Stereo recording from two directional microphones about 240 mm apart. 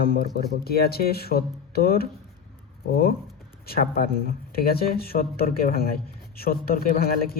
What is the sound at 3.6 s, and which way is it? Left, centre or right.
Speech, left.